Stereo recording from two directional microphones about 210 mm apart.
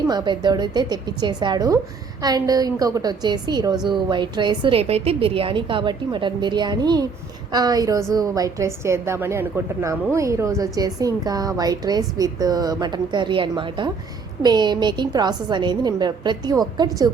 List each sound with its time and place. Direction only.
0.1 s a woman's voice: 20° right (ahead or behind)